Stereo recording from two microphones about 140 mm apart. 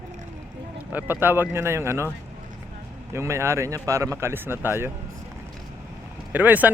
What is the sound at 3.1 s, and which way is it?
Speech, 20° right (ahead or behind).